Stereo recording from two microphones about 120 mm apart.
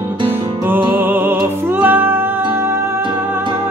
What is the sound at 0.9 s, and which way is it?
Music, 15° right (ahead or behind).